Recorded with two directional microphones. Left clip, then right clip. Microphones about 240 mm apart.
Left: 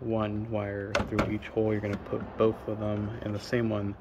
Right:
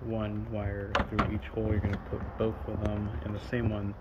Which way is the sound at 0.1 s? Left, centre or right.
Centre.